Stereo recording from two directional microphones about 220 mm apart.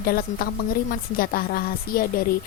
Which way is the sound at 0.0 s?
40° left (ahead or behind).